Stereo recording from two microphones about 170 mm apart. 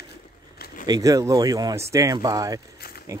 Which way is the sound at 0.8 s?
20° right (ahead or behind).